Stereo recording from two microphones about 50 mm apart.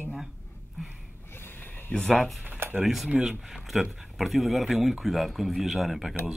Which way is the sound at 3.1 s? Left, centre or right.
Centre.